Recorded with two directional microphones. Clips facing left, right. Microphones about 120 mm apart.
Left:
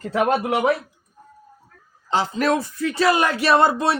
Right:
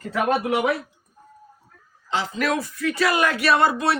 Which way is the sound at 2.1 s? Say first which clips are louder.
Left 4 dB; 35° left (ahead or behind).